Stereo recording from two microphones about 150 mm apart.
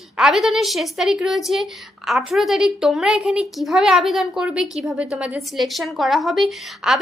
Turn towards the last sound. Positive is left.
turn(degrees=0)  # may be behind; listen again after turning